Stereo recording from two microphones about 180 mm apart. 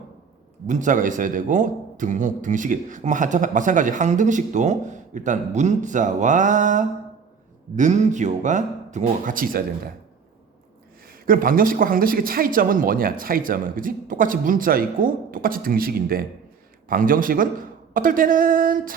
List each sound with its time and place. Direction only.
0.7 s a man's voice: 45° right (ahead or behind)
11.3 s a man's voice: 50° right (ahead or behind)